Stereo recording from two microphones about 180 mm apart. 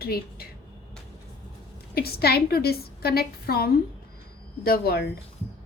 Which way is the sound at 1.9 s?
60° left (ahead or behind).